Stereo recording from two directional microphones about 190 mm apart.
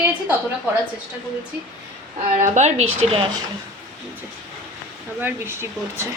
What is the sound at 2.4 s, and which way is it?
A woman's voice, 40° right (ahead or behind).